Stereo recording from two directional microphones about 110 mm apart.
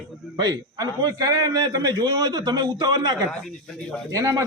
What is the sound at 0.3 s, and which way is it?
A man's voice, 35° right (ahead or behind).